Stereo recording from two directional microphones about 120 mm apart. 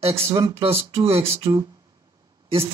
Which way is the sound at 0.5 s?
50° right (ahead or behind).